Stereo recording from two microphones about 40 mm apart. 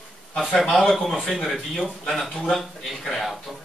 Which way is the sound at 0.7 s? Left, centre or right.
Centre.